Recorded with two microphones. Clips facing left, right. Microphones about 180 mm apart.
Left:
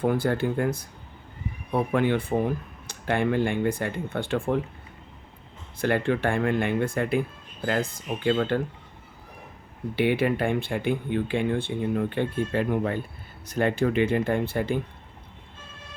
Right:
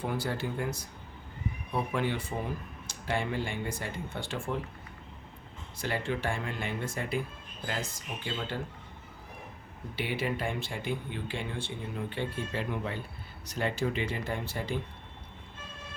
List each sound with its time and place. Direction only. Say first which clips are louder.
0.0 s speech: left 9 dB; 55° left (ahead or behind)
5.8 s speech: left 9 dB; 60° left (ahead or behind)
9.9 s speech: left 10 dB; 60° left (ahead or behind)